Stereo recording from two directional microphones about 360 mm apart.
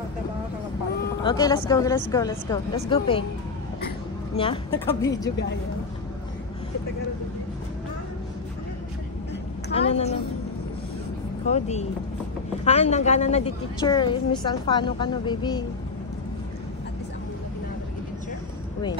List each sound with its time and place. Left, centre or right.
1.2 s a woman's voice: centre
4.4 s a woman's voice: centre
9.7 s a woman's voice: centre
11.4 s a woman's voice: centre